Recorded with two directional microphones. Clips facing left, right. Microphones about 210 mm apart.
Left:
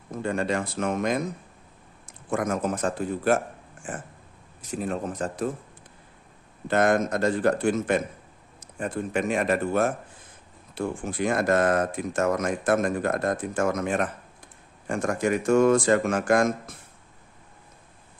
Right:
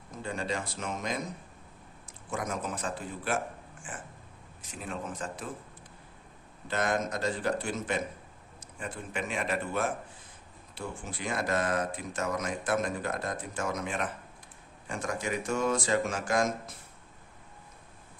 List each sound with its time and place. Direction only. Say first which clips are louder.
0.2 s speech: left 8 dB; 60° left (ahead or behind)
2.3 s speech: left 8 dB; 50° left (ahead or behind)
6.7 s speech: left 8 dB; 55° left (ahead or behind)